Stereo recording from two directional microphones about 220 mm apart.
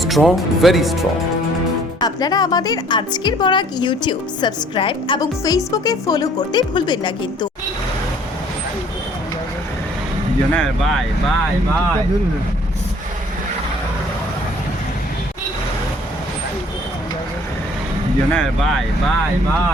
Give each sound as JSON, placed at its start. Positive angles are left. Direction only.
{"t": 0.0, "sound": "speech", "side_deg": 0}
{"t": 2.0, "sound": "speech", "side_deg": 20}
{"t": 10.5, "sound": "speech", "side_deg": 0}
{"t": 18.3, "sound": "speech", "side_deg": 5}